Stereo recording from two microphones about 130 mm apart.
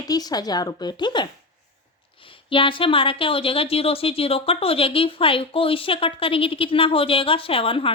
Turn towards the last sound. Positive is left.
turn(degrees=45)  # may be behind; listen again after turning